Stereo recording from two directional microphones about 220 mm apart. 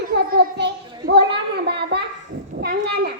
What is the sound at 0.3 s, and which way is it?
Children playing, 50° right (ahead or behind).